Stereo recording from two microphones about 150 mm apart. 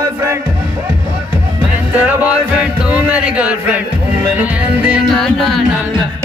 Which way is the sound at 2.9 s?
10° right (ahead or behind).